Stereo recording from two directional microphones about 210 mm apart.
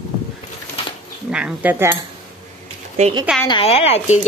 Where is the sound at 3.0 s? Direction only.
35° right (ahead or behind).